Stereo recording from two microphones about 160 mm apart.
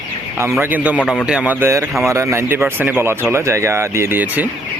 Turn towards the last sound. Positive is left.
turn(degrees=-10)  # may be behind; listen again after turning